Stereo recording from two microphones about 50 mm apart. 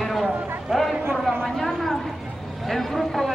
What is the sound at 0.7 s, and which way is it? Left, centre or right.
A man's voice, centre.